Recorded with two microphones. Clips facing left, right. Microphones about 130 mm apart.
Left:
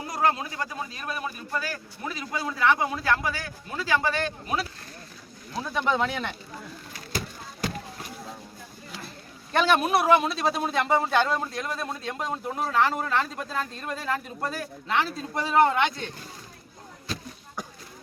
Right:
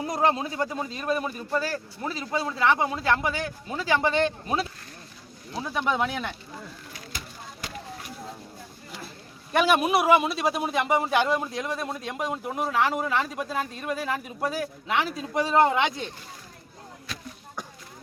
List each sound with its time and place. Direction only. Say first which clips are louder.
0.0 s speech: right 2 dB; 25° right (ahead or behind)
5.6 s a man's voice: left 1 dB; 10° right (ahead or behind)
9.5 s a man's voice: right 1 dB; 10° right (ahead or behind)